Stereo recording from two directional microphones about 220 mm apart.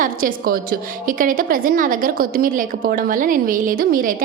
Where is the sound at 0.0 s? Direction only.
40° right (ahead or behind).